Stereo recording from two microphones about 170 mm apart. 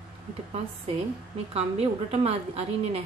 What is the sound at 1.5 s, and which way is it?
A woman's voice, 35° right (ahead or behind).